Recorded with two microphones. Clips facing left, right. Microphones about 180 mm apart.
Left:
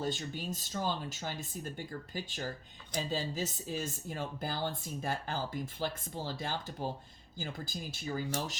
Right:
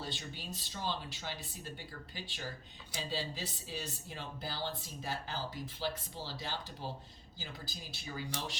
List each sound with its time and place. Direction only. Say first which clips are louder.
0.0 s speech: left 7 dB; 45° left (ahead or behind)